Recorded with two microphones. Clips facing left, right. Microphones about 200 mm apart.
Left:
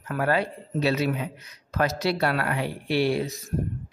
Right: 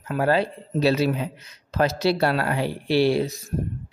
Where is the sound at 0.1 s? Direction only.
30° right (ahead or behind).